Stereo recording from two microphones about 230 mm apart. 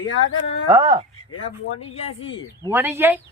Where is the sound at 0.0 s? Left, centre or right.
Left.